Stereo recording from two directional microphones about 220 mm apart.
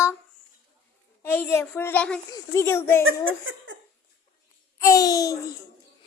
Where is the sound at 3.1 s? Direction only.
60° right (ahead or behind).